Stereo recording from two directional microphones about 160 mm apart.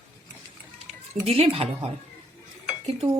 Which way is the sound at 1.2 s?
35° right (ahead or behind).